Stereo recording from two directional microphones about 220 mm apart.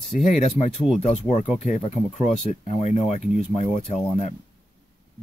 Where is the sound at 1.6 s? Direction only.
30° left (ahead or behind).